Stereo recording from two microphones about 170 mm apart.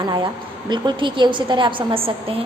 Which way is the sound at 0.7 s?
25° right (ahead or behind).